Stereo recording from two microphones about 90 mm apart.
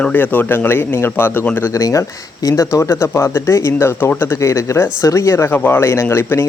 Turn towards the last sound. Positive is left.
turn(degrees=25)  # may be behind; listen again after turning